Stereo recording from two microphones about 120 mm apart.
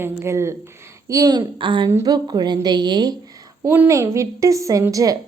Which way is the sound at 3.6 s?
20° right (ahead or behind).